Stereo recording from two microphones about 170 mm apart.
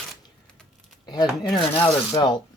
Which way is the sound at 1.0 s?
25° left (ahead or behind).